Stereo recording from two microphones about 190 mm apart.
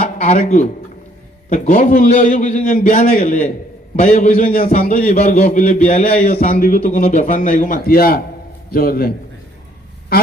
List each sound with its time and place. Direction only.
0.0 s a man's voice: 35° left (ahead or behind); by 9.1 s 50° left (ahead or behind)